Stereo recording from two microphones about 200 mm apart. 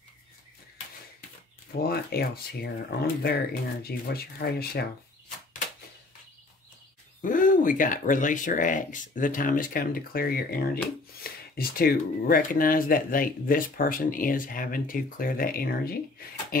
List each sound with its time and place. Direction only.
1.7 s speech: 50° left (ahead or behind)
7.2 s speech: 45° left (ahead or behind)